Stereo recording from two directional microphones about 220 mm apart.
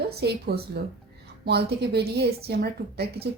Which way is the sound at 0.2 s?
45° right (ahead or behind).